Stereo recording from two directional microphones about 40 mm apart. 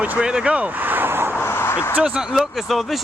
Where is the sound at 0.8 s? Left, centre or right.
Right.